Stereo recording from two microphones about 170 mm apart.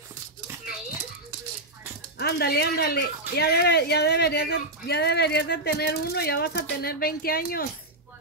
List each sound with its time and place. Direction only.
2.1 s speech: 70° left (ahead or behind)